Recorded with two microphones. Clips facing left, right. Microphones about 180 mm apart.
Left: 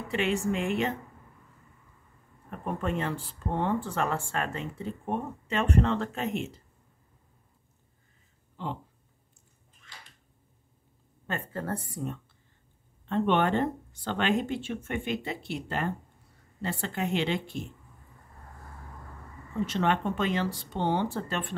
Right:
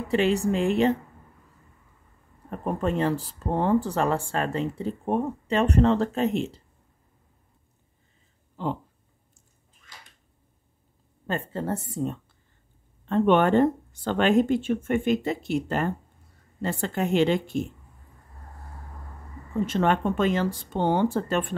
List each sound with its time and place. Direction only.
0.1 s speech: 35° right (ahead or behind)
2.5 s speech: 35° right (ahead or behind)
8.6 s speech: 40° right (ahead or behind)
11.2 s a woman's voice: 35° right (ahead or behind)
13.1 s speech: 45° right (ahead or behind)
19.6 s speech: 50° right (ahead or behind)